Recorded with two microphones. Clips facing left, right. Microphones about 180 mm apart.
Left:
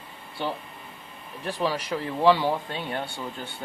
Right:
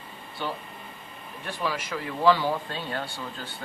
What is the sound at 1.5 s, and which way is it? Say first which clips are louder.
Speech: left 4 dB; 35° left (ahead or behind).